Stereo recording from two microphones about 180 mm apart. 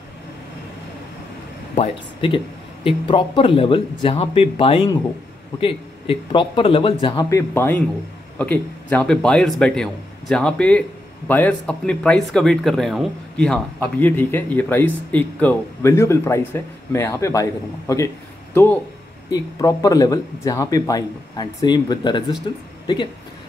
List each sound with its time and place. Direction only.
1.8 s a man's voice: 30° left (ahead or behind)